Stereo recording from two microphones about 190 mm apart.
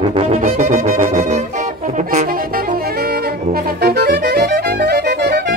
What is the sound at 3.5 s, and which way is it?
Music, 55° right (ahead or behind).